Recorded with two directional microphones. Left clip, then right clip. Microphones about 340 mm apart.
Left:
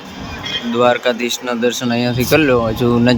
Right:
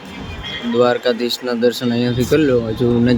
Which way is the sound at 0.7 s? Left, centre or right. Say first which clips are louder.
Left 1 dB; centre.